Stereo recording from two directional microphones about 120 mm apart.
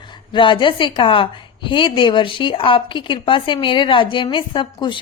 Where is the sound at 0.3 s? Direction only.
40° left (ahead or behind).